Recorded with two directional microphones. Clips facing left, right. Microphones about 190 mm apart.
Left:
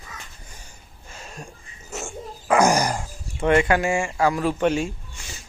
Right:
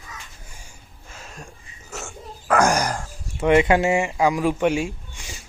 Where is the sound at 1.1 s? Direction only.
Centre (ahead or behind).